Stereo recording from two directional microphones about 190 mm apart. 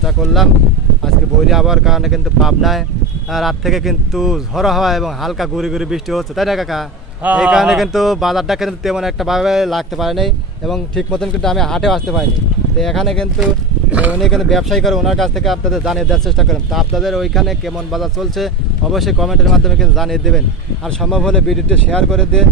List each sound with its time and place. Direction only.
0.0 s speech: centre (ahead or behind)